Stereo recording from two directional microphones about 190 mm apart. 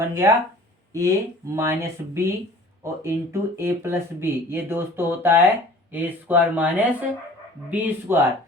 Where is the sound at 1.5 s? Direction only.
15° right (ahead or behind).